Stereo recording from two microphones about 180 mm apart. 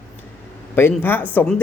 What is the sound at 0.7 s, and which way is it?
Speech, 10° left (ahead or behind).